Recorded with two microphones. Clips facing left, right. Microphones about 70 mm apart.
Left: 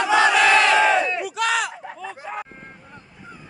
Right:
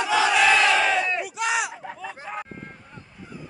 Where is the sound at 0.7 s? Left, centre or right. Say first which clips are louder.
Left 5 dB; left.